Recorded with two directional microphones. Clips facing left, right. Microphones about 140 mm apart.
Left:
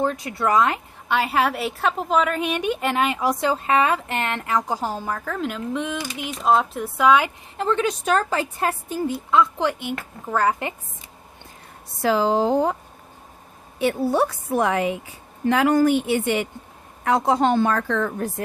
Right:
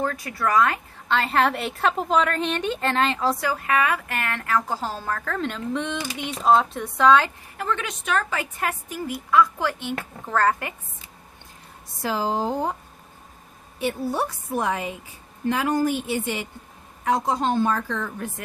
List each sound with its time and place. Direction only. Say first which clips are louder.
0.0 s a woman's voice: left 3 dB; 20° left (ahead or behind)
3.4 s a woman's voice: left 3 dB; 25° left (ahead or behind); by 7.3 s 10° left (ahead or behind)
7.5 s a woman's voice: left 8 dB; 30° left (ahead or behind); by 10.7 s 15° left (ahead or behind)
12.0 s speech: left 6 dB; 90° left
13.7 s a woman's voice: left 5 dB; 80° left; by 18.1 s 60° left (ahead or behind)